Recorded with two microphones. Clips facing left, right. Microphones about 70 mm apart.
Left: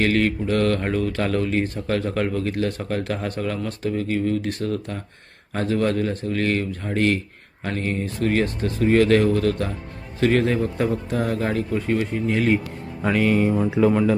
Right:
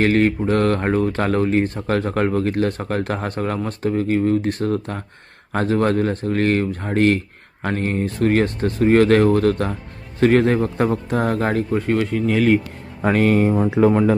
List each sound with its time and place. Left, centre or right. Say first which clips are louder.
0.0 s speech: right 4 dB; right
13.0 s speech: right 3 dB; right